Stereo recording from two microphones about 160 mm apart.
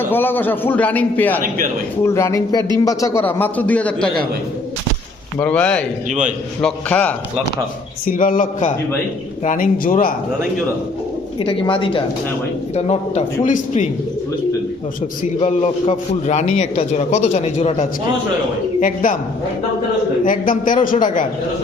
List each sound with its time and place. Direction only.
0.0 s a man's voice: 15° left (ahead or behind)
5.4 s a man's voice: 10° left (ahead or behind)
6.1 s a man's voice: 50° right (ahead or behind)
6.6 s a man's voice: 5° left (ahead or behind)
8.0 s speech: 60° left (ahead or behind)
11.3 s speech: 35° left (ahead or behind)
12.7 s a man's voice: 40° left (ahead or behind)
15.4 s a man's voice: 40° left (ahead or behind)
18.8 s speech: 55° left (ahead or behind)
20.2 s speech: 60° left (ahead or behind)